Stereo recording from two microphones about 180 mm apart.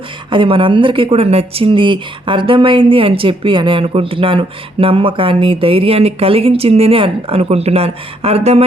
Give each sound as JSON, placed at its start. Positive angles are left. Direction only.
{"t": 0.3, "sound": "speech", "side_deg": -30}